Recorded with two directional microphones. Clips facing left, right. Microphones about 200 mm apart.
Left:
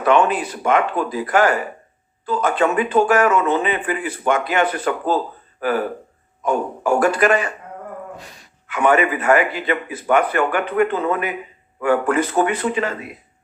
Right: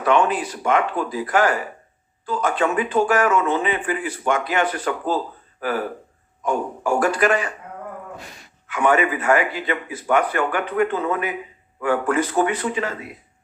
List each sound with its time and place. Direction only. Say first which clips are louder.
0.0 s a man's voice: left 2 dB; 60° left (ahead or behind)
8.7 s a man's voice: left 2 dB; 60° left (ahead or behind)